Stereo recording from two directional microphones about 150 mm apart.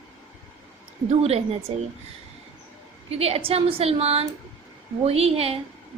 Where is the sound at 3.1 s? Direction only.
40° right (ahead or behind).